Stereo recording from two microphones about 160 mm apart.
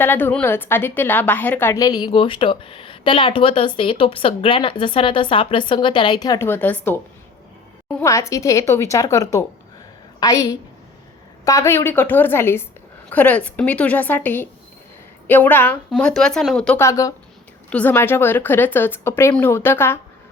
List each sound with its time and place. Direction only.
0.0 s a woman's voice: 15° left (ahead or behind)
16.7 s speech: 20° left (ahead or behind)
17.7 s a woman's voice: 10° left (ahead or behind)